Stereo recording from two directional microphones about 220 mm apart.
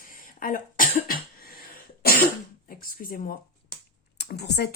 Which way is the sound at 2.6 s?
40° left (ahead or behind).